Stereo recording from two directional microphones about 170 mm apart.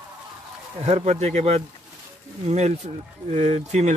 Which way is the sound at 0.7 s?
35° right (ahead or behind).